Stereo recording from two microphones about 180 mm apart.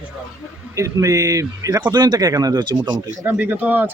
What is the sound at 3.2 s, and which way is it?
Speech, 10° right (ahead or behind).